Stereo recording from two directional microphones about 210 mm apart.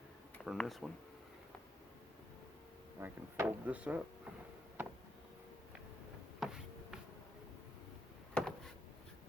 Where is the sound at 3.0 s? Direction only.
10° right (ahead or behind).